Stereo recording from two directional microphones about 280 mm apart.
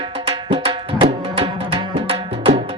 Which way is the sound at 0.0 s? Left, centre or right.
Centre.